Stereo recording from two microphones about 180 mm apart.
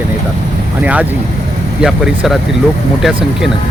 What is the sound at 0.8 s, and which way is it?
Speech, 10° right (ahead or behind).